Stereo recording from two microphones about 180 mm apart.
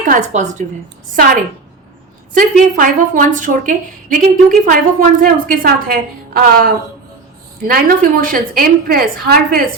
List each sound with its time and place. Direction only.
0.1 s a woman's voice: 40° right (ahead or behind)
2.3 s a woman's voice: 45° right (ahead or behind)